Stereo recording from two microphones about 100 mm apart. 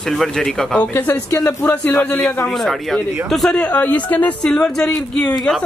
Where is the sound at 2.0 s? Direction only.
10° left (ahead or behind).